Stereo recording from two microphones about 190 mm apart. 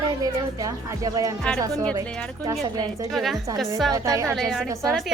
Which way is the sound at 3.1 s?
Centre (ahead or behind).